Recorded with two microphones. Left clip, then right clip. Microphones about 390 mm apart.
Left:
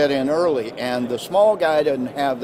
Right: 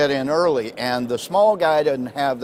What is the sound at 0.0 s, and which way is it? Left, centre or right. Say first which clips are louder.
Speech: even; right.